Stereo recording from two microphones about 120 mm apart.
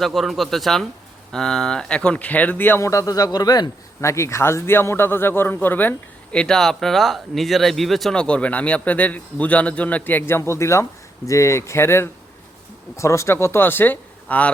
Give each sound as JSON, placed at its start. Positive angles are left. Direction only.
{"t": 0.0, "sound": "speech", "side_deg": 0}